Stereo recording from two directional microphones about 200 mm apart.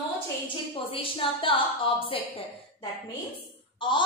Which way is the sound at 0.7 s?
25° left (ahead or behind).